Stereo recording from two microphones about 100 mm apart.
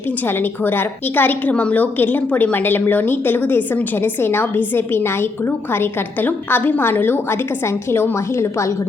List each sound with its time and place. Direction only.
0.3 s a woman's voice: 20° left (ahead or behind)